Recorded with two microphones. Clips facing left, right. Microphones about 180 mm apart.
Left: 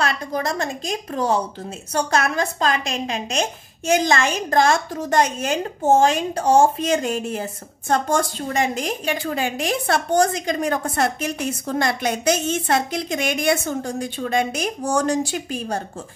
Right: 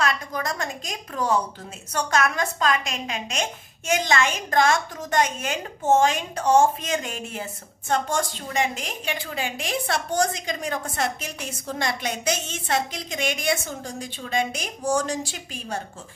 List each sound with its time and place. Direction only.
0.0 s a woman's voice: 30° left (ahead or behind); by 15.4 s 60° left (ahead or behind)